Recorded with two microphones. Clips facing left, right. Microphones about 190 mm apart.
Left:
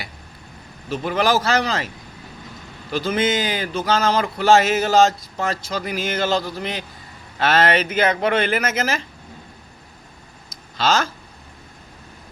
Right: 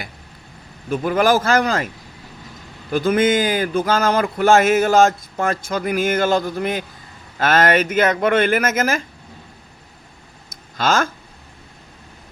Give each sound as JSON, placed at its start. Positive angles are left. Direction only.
{"t": 0.9, "sound": "speech", "side_deg": -50}
{"t": 2.9, "sound": "speech", "side_deg": -50}
{"t": 10.8, "sound": "speech", "side_deg": -50}